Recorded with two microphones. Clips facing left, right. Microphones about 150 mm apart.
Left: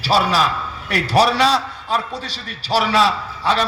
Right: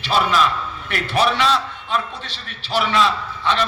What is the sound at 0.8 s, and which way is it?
A man's voice, 40° left (ahead or behind).